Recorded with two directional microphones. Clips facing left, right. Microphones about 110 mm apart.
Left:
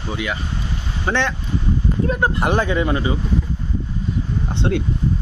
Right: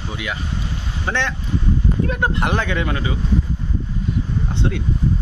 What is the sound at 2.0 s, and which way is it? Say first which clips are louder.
Speech: left 3 dB; 25° left (ahead or behind).